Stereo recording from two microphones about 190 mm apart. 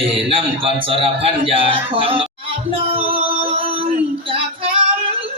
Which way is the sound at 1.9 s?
30° right (ahead or behind).